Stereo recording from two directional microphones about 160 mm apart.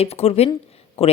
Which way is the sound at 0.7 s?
40° left (ahead or behind).